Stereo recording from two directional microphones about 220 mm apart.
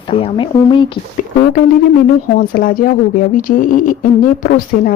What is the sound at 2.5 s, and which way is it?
Speech, 40° left (ahead or behind).